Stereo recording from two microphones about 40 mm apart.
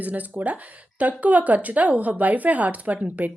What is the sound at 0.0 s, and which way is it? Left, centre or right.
Speech, right.